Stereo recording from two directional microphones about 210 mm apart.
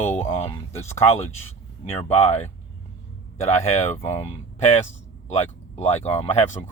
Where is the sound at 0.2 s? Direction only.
30° left (ahead or behind).